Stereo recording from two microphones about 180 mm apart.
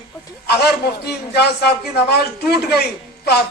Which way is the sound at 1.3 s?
65° left (ahead or behind).